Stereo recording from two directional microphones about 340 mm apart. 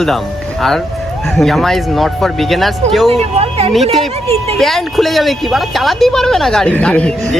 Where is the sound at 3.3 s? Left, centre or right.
Centre.